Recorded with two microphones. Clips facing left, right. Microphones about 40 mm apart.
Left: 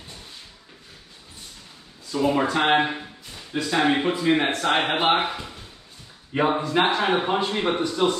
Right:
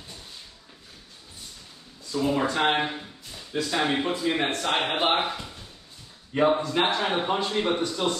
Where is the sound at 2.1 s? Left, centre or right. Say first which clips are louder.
Left 3 dB; left.